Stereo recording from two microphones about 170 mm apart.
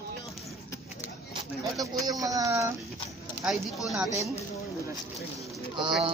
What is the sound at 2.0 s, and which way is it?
Speech, 20° right (ahead or behind).